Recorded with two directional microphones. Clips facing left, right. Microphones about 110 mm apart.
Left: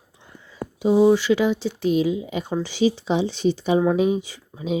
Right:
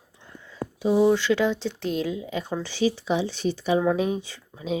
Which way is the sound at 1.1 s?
5° left (ahead or behind).